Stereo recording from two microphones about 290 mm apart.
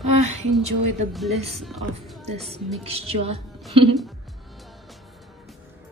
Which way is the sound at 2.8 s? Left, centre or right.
Right.